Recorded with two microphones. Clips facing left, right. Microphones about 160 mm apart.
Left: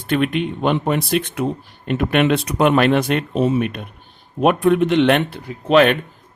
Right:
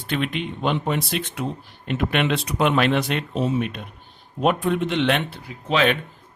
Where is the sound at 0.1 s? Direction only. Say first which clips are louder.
Left 7 dB; 50° left (ahead or behind).